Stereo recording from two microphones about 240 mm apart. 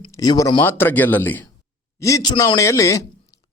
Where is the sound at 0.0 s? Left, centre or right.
Centre.